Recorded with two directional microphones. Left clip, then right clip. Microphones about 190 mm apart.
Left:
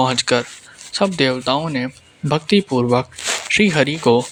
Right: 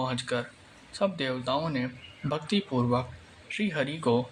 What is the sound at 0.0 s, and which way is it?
Speech, 45° left (ahead or behind).